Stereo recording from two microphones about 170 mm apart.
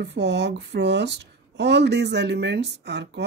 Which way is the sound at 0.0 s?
90° right.